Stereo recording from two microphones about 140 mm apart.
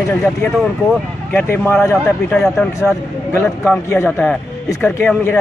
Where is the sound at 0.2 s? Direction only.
Centre (ahead or behind).